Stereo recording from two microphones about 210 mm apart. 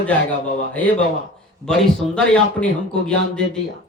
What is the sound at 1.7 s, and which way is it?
A man's voice, 5° left (ahead or behind).